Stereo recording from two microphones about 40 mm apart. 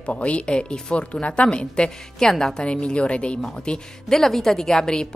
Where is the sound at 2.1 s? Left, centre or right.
Centre.